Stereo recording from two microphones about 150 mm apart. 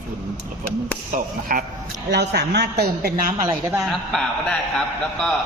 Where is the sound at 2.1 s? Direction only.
90° right.